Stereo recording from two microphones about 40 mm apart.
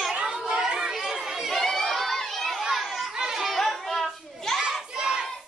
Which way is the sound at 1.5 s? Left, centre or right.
Centre.